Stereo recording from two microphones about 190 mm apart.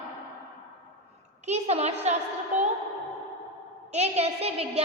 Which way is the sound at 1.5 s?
35° right (ahead or behind).